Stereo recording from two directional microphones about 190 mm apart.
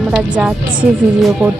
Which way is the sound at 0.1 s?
5° right (ahead or behind).